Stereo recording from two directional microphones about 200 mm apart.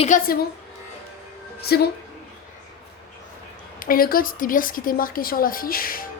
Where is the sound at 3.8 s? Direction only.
45° left (ahead or behind).